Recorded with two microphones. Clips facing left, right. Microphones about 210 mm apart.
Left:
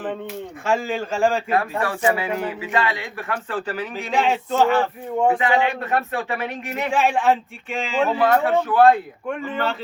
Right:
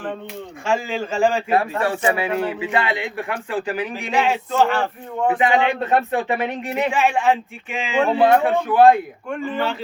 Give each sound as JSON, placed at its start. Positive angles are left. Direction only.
{"t": 0.6, "sound": "speech", "side_deg": 0}
{"t": 1.5, "sound": "speech", "side_deg": -15}
{"t": 4.2, "sound": "speech", "side_deg": 0}
{"t": 5.4, "sound": "speech", "side_deg": -20}
{"t": 7.0, "sound": "speech", "side_deg": 0}
{"t": 8.1, "sound": "speech", "side_deg": -15}